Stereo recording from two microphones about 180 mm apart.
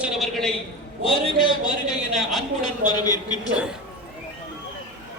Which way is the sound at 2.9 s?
20° left (ahead or behind).